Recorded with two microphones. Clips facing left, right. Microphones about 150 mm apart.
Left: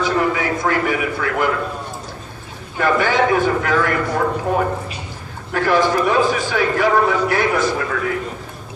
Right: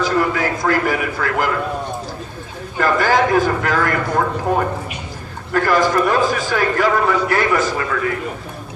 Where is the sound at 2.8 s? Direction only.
40° right (ahead or behind).